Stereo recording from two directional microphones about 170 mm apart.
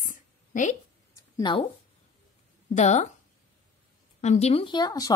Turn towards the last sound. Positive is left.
turn(degrees=25)  # may be behind; listen again after turning